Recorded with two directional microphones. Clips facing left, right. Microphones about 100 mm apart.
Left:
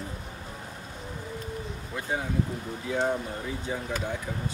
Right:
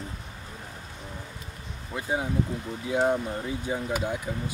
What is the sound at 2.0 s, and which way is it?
Speech, 5° right (ahead or behind).